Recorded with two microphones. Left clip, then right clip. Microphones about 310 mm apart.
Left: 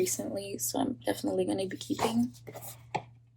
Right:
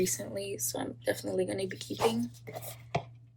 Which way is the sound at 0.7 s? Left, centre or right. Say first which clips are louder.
Left 3 dB; centre.